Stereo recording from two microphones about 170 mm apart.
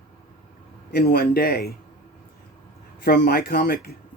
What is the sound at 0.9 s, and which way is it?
Speech, 65° left (ahead or behind).